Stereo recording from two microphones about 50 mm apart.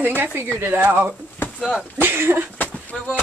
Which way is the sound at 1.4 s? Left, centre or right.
Left.